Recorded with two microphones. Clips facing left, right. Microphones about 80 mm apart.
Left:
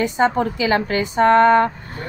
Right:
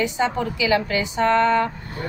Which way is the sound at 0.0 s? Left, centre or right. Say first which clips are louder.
Left 4 dB; left.